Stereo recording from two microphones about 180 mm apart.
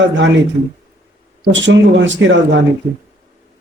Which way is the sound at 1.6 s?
90° right.